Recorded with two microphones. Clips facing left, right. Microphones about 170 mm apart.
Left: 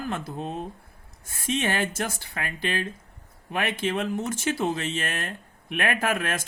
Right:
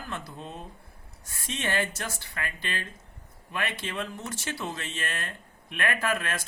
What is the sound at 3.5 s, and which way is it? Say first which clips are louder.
Speech: left 7 dB; 50° left (ahead or behind).